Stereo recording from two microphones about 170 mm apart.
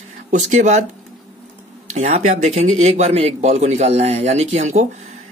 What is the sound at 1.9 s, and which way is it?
Speech, 45° right (ahead or behind).